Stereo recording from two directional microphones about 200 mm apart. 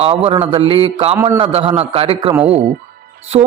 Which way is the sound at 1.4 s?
30° right (ahead or behind).